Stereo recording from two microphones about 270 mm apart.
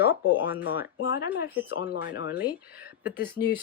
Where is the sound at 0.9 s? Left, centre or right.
Left.